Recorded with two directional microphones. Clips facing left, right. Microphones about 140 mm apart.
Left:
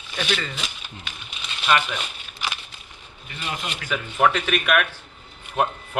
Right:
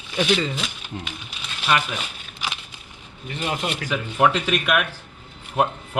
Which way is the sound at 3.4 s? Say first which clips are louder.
Right 5 dB; 40° right (ahead or behind).